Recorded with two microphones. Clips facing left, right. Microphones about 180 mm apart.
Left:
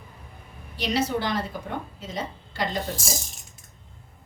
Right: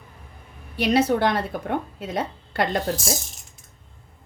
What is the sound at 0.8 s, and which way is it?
A woman's voice, 60° right (ahead or behind).